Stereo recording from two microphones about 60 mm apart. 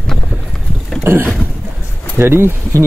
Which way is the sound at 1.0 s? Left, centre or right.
Right.